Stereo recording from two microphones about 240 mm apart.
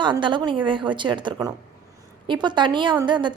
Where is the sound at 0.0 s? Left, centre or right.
Centre.